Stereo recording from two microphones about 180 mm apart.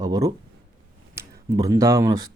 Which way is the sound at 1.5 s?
20° right (ahead or behind).